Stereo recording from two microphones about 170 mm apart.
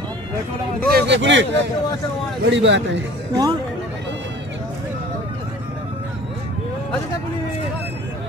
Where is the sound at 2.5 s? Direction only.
90° right.